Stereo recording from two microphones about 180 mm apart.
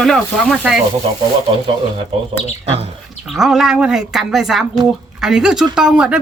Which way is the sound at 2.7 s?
35° right (ahead or behind).